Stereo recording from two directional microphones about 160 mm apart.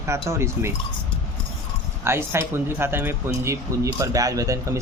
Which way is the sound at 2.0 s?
15° right (ahead or behind).